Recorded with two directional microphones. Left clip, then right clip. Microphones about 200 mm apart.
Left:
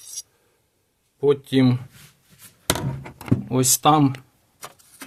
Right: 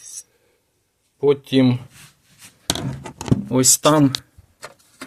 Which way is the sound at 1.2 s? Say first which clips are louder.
Right 2 dB; centre (ahead or behind).